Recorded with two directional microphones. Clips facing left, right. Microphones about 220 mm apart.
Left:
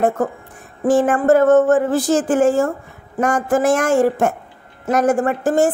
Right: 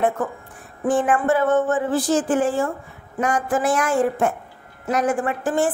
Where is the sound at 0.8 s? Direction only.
45° left (ahead or behind).